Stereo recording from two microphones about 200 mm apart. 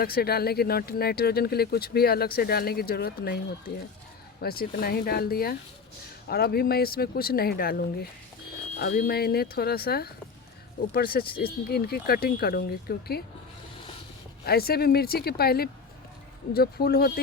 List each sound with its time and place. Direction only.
0.0 s speech: 50° left (ahead or behind)
8.8 s speech: 50° left (ahead or behind)
14.4 s speech: 50° left (ahead or behind)